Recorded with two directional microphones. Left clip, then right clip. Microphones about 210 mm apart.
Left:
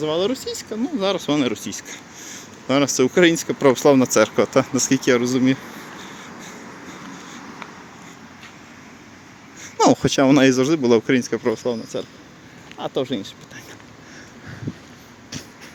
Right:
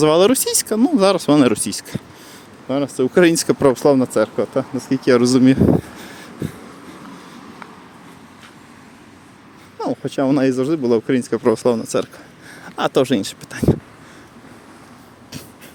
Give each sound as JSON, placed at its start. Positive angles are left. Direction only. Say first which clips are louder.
{"t": 0.0, "sound": "speech", "louder": "right 8 dB", "side_deg": -45}
{"t": 2.3, "sound": "a sound", "louder": "left 2 dB", "side_deg": 0}
{"t": 3.2, "sound": "speech", "louder": "right 4 dB", "side_deg": -30}
{"t": 3.6, "sound": "speech", "louder": "left 1 dB", "side_deg": -15}
{"t": 5.1, "sound": "speech", "louder": "right 5 dB", "side_deg": -25}
{"t": 9.7, "sound": "a sound", "louder": "left 8 dB", "side_deg": 20}
{"t": 10.1, "sound": "speech", "louder": "left 2 dB", "side_deg": 0}
{"t": 11.5, "sound": "speech", "louder": "right 7 dB", "side_deg": -30}